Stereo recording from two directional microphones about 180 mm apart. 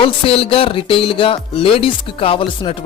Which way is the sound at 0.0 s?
30° left (ahead or behind).